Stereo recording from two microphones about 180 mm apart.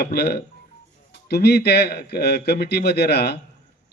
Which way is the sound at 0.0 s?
60° left (ahead or behind).